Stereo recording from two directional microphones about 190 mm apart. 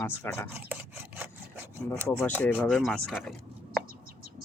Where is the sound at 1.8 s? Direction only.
10° left (ahead or behind).